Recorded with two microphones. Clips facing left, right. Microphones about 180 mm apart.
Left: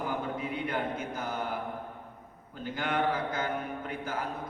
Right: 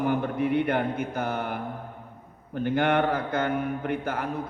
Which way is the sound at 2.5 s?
65° right (ahead or behind).